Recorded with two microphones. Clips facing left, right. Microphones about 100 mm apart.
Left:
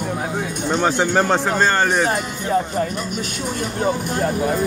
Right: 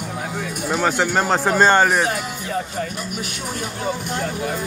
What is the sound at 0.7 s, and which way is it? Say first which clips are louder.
Speech: left 1 dB; 5° right (ahead or behind).